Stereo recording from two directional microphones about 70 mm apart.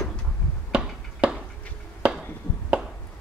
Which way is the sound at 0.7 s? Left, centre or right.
Centre.